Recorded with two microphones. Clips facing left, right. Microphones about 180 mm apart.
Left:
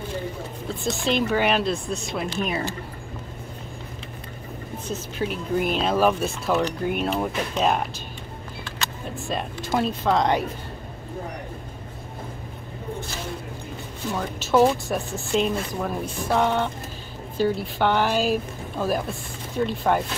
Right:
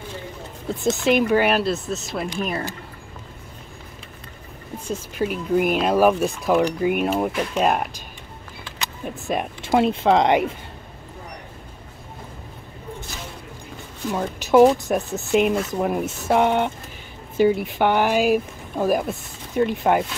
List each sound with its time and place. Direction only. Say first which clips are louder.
0.8 s speech: right 5 dB; 15° right (ahead or behind)
4.7 s speech: right 3 dB; 10° right (ahead or behind)
14.1 s speech: right 5 dB; 15° right (ahead or behind)